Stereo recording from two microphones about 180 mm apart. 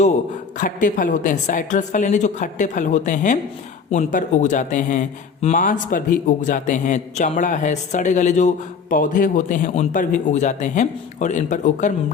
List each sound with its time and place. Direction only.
0.6 s speech: 45° left (ahead or behind)